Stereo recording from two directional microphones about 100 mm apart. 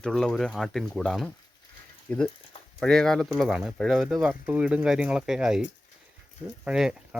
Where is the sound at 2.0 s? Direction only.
15° left (ahead or behind).